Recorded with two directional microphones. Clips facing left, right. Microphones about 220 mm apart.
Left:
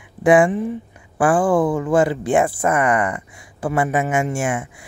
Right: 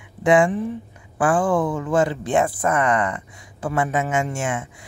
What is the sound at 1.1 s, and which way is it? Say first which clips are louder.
Speech: left 3 dB; 30° left (ahead or behind).